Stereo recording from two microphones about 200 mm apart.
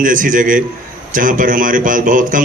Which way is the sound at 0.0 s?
40° right (ahead or behind).